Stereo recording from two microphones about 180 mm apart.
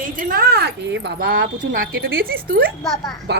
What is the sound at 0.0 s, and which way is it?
A child's voice, 50° right (ahead or behind).